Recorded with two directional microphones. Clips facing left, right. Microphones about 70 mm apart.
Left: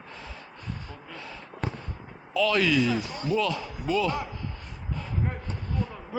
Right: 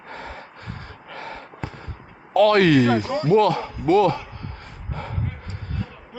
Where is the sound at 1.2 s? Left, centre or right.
Right.